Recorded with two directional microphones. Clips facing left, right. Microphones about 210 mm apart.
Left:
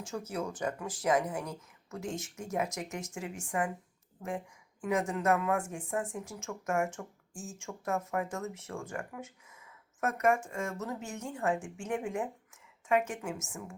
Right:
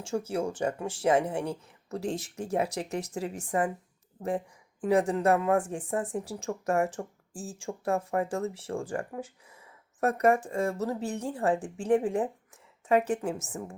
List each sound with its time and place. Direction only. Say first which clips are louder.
0.0 s speech: right 6 dB; 30° right (ahead or behind)
4.8 s speech: right 6 dB; 35° right (ahead or behind)